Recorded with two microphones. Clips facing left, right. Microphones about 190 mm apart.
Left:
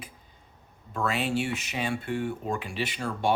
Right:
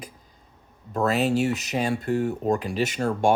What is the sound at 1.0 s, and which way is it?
Speech, 40° right (ahead or behind).